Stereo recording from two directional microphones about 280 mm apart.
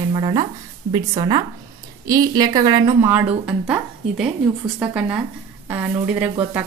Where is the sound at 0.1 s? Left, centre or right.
Centre.